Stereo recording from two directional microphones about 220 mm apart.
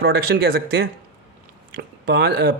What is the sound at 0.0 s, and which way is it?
Speech, 45° right (ahead or behind).